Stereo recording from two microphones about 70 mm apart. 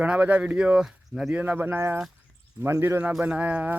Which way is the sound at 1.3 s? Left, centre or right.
Right.